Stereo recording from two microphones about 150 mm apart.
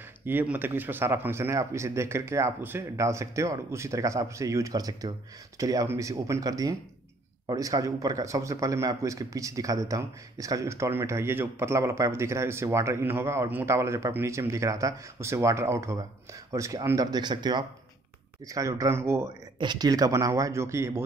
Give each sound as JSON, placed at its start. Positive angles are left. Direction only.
{"t": 0.2, "sound": "speech", "side_deg": -15}
{"t": 19.6, "sound": "speech", "side_deg": -30}